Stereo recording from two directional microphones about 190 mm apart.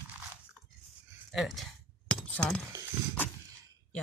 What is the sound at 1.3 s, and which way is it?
Glass, centre (ahead or behind).